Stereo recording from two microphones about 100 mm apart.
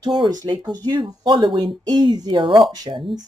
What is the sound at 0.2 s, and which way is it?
A woman's voice, 45° right (ahead or behind).